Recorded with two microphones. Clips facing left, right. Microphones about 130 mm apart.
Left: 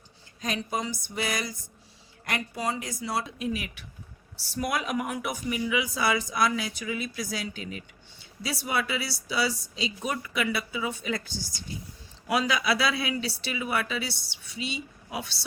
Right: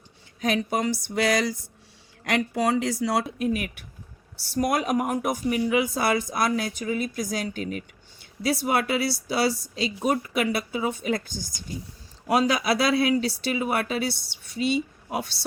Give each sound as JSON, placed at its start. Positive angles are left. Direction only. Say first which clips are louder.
{"t": 0.4, "sound": "a sound", "louder": "right 6 dB", "side_deg": -70}
{"t": 2.2, "sound": "a woman's voice", "louder": "right 7 dB", "side_deg": -90}
{"t": 3.2, "sound": "speech", "louder": "right 5 dB", "side_deg": -50}